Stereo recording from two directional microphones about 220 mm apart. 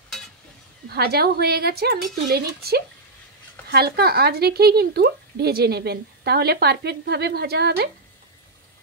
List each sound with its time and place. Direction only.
0.8 s a woman's voice: 45° right (ahead or behind)